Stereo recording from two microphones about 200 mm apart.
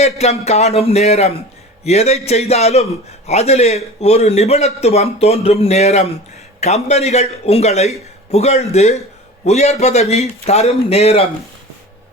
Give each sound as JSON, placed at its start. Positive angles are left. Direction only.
{"t": 0.0, "sound": "a man's voice", "side_deg": 35}